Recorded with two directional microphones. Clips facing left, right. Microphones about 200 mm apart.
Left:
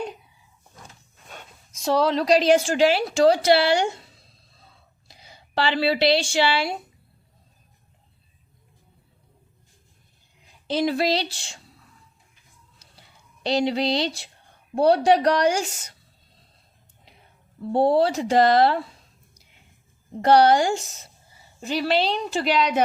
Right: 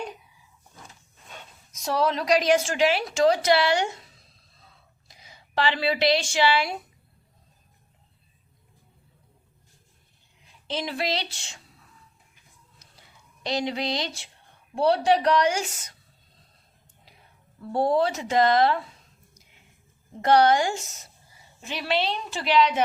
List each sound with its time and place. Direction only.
1.8 s a woman's voice: 30° left (ahead or behind)
10.7 s a woman's voice: 35° left (ahead or behind)
13.4 s a woman's voice: 30° left (ahead or behind)
17.6 s a woman's voice: 25° left (ahead or behind)
20.2 s a woman's voice: 35° left (ahead or behind)